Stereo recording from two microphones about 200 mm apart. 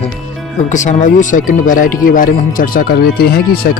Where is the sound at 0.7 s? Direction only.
40° left (ahead or behind).